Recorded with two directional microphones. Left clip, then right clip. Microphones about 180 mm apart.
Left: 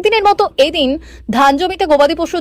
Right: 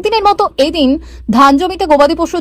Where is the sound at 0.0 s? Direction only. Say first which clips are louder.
Right 1 dB; centre (ahead or behind).